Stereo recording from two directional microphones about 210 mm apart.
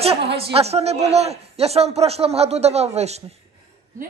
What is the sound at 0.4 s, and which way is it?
A woman's voice, 30° right (ahead or behind).